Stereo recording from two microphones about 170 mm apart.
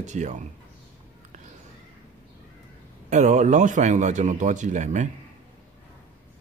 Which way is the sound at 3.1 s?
45° right (ahead or behind).